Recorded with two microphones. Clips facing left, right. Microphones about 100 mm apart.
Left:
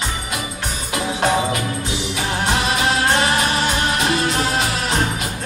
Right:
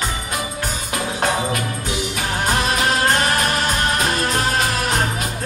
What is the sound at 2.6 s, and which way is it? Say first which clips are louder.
Music: even; 40° right (ahead or behind).